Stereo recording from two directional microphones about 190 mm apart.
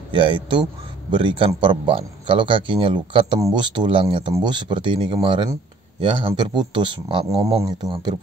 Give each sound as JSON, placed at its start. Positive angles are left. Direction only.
{"t": 0.1, "sound": "a man's voice", "side_deg": -25}